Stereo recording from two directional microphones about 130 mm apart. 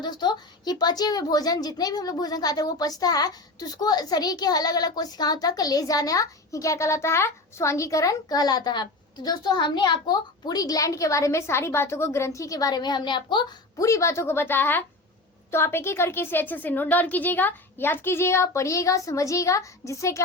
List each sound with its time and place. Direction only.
0.0 s a woman's voice: 35° left (ahead or behind)
13.8 s a woman's voice: 25° left (ahead or behind)